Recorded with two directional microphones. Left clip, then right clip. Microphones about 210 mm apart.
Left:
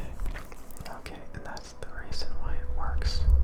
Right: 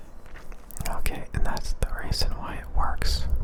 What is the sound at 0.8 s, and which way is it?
Whispering, 20° right (ahead or behind).